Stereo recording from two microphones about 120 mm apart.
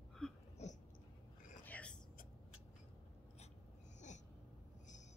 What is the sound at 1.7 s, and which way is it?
Whispering, 10° left (ahead or behind).